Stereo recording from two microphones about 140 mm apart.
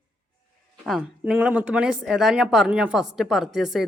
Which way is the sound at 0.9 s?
5° right (ahead or behind).